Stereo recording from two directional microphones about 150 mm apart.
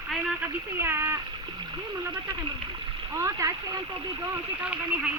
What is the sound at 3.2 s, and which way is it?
Speech, 20° right (ahead or behind).